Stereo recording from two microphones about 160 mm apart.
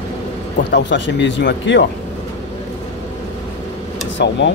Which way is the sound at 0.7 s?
90° left.